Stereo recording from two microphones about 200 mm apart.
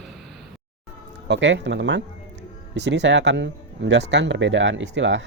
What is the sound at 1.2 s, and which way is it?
Speech, 65° right (ahead or behind).